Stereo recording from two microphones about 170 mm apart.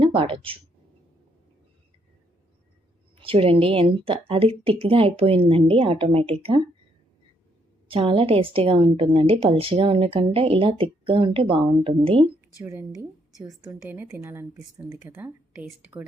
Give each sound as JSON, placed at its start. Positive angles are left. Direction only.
{"t": 0.0, "sound": "speech", "side_deg": -30}
{"t": 3.2, "sound": "a woman's voice", "side_deg": -35}
{"t": 7.9, "sound": "a woman's voice", "side_deg": -35}
{"t": 12.5, "sound": "speech", "side_deg": -15}